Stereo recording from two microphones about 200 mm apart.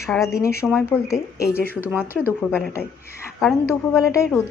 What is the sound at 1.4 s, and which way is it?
Speech, 50° left (ahead or behind).